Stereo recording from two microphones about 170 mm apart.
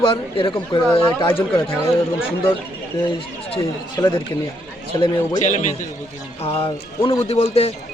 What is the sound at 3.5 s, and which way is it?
Speech, 25° left (ahead or behind).